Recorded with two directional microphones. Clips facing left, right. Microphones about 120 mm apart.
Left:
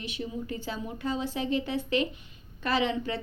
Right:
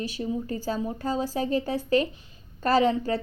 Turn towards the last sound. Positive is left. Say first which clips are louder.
# right 6 dB
turn(degrees=-40)  # may be behind; listen again after turning